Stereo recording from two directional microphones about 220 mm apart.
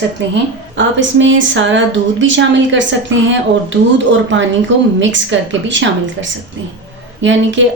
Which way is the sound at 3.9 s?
55° right (ahead or behind).